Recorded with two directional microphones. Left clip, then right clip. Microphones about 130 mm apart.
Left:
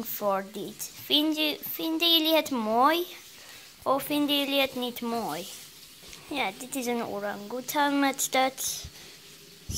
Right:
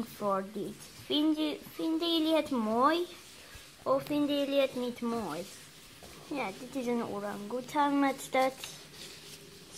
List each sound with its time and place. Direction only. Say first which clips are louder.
0.2 s a child's voice: left 4 dB; 30° left (ahead or behind)